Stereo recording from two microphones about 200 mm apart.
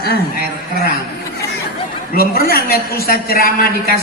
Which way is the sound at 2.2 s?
50° left (ahead or behind).